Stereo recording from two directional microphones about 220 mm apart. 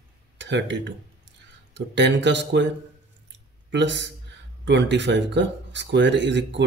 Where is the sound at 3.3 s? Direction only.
55° right (ahead or behind).